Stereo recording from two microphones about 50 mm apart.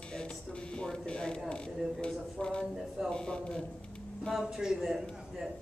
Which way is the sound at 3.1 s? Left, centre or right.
Left.